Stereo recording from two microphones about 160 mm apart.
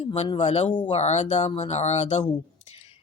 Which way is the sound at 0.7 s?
30° left (ahead or behind).